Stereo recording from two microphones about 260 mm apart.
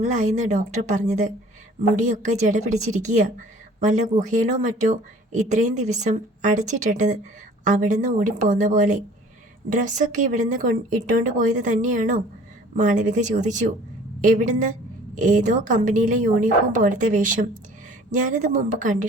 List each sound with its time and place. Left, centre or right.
0.0 s speech: right